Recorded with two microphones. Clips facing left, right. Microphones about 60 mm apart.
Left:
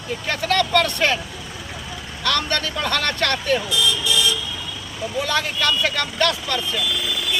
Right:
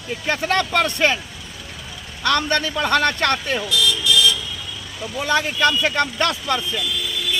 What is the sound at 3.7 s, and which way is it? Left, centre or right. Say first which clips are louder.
Car alarm: right 1 dB; left.